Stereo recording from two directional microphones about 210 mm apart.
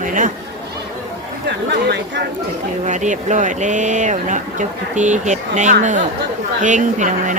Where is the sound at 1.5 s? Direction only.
55° right (ahead or behind).